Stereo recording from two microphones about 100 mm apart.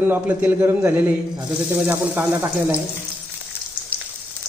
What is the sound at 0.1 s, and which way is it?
Frying, 20° right (ahead or behind).